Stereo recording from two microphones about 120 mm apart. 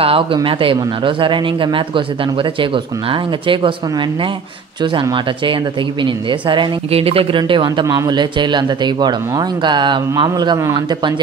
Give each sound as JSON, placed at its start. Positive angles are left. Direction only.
{"t": 0.0, "sound": "a man's voice", "side_deg": -50}
{"t": 5.1, "sound": "a man's voice", "side_deg": -45}